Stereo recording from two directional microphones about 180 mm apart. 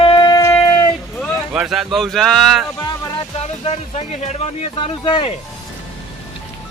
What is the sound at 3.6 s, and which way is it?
Speech, 35° left (ahead or behind).